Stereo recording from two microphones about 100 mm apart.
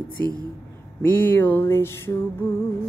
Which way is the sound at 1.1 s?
20° left (ahead or behind).